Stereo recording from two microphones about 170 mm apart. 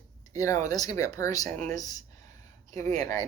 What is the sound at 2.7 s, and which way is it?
Speech, 45° right (ahead or behind).